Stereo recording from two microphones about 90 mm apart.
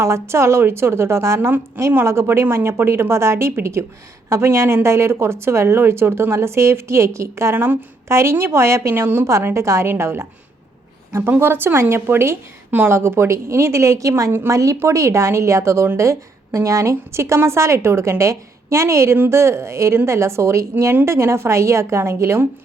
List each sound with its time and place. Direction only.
0.0 s a woman's voice: 30° right (ahead or behind)